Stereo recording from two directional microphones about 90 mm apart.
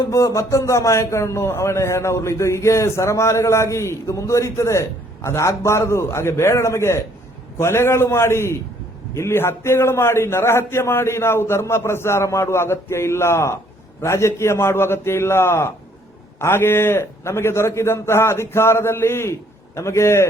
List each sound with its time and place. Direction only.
0.1 s a man's voice: 35° left (ahead or behind)